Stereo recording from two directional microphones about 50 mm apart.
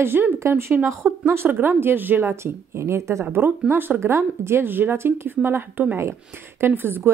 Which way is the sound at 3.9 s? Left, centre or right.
Right.